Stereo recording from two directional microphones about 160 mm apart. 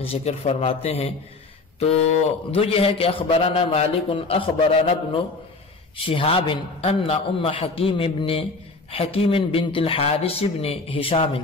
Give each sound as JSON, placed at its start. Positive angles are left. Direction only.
{"t": 0.0, "sound": "a man's voice", "side_deg": 40}
{"t": 5.9, "sound": "a man's voice", "side_deg": 35}